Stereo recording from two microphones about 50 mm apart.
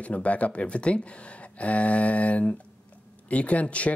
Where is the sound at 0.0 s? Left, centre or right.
Left.